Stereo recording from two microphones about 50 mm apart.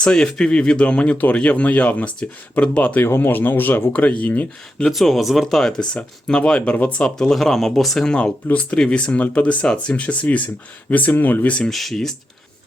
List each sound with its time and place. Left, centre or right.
0.0 s speech: centre; by 3.0 s left
3.0 s speech: left
3.9 s speech: left
4.9 s speech: centre
6.6 s speech: left
7.0 s speech: centre
8.0 s speech: centre; by 11.5 s left
11.7 s speech: centre